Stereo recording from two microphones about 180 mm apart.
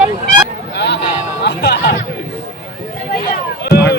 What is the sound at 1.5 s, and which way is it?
Music, 65° left (ahead or behind).